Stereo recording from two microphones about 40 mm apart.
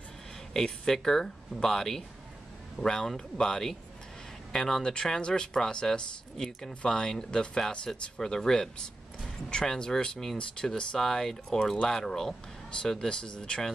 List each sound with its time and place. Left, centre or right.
0.5 s speech: centre